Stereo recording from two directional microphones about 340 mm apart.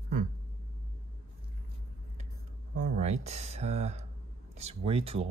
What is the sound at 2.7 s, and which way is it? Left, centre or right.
Speech, right.